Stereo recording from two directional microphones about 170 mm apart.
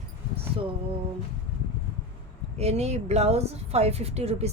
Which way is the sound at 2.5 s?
40° right (ahead or behind).